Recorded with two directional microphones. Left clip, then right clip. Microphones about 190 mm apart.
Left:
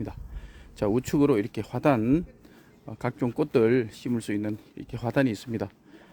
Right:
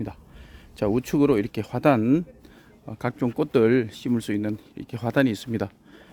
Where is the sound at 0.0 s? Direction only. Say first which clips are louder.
Right 3 dB; 10° right (ahead or behind).